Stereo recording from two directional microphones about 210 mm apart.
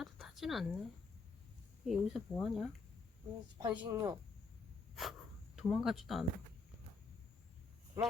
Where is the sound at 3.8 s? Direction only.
15° right (ahead or behind).